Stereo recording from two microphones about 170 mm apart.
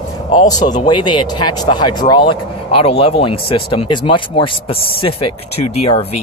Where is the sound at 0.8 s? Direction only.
25° left (ahead or behind).